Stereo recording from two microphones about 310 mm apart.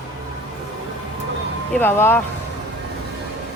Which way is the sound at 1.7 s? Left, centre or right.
Centre.